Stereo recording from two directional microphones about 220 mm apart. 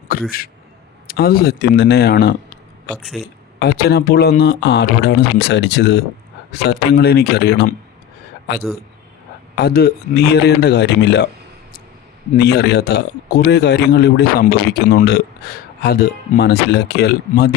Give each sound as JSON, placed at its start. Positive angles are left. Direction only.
{"t": 0.1, "sound": "a man's voice", "side_deg": 40}
{"t": 2.9, "sound": "speech", "side_deg": 0}
{"t": 3.6, "sound": "speech", "side_deg": 45}
{"t": 12.4, "sound": "speech", "side_deg": 50}